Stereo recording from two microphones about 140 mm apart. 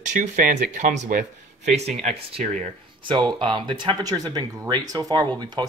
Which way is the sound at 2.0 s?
55° right (ahead or behind).